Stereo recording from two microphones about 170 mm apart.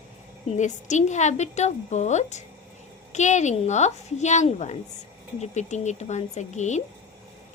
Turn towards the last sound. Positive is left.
turn(degrees=45)  # may be behind; listen again after turning